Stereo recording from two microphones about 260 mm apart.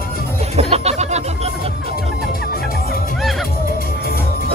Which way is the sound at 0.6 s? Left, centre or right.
Right.